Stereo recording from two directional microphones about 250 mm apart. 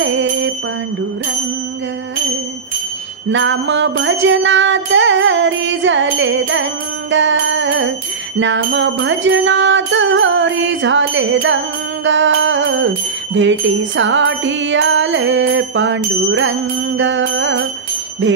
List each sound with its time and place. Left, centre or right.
0.0 s jingle bell: right
3.3 s music: right